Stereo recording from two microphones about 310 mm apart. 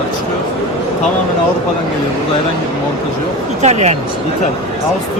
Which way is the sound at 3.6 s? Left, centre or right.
Right.